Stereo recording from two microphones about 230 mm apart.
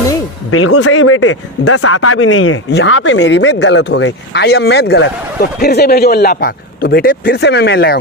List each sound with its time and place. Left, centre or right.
0.5 s a man's voice: left